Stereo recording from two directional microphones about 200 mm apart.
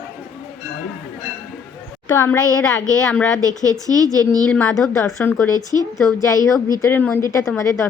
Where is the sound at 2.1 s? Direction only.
15° left (ahead or behind).